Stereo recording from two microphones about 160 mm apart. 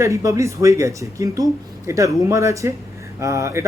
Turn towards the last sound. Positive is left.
turn(degrees=-20)  # may be behind; listen again after turning